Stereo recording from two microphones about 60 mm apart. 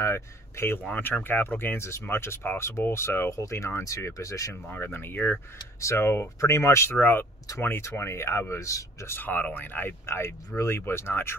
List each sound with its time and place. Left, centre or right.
0.0 s speech: left
0.9 s speech: left
1.9 s speech: left
4.6 s speech: left
5.8 s speech: left
7.0 s speech: left
8.0 s speech: left
9.1 s speech: left